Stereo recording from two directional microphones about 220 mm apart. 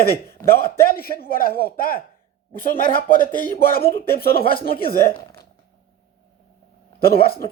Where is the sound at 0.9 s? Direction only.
40° left (ahead or behind).